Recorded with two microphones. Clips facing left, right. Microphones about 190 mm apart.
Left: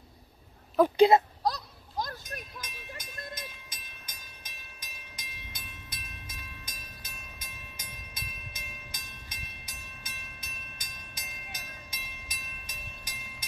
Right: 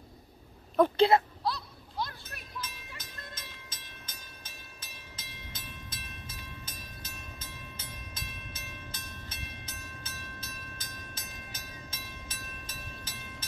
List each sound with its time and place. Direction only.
0.7 s speech: 10° left (ahead or behind)
1.4 s a sound: 45° left (ahead or behind)
2.6 s sheep: 50° left (ahead or behind)
3.0 s train: 15° left (ahead or behind)